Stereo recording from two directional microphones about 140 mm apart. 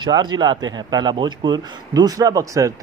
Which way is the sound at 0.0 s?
30° right (ahead or behind).